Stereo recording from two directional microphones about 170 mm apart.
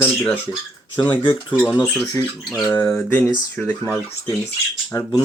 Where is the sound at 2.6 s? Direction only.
10° left (ahead or behind).